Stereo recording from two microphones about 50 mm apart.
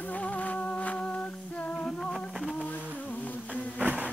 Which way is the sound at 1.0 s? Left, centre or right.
Left.